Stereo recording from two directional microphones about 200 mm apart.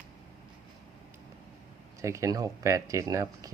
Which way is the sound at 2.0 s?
15° right (ahead or behind).